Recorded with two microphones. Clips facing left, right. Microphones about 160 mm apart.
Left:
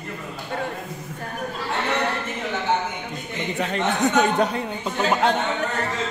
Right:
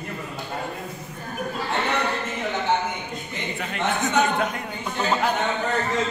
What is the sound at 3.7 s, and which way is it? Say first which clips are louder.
Speech: left 2 dB; 35° left (ahead or behind).